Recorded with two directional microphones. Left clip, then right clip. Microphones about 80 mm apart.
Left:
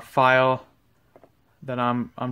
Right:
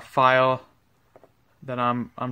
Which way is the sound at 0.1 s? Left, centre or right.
Centre.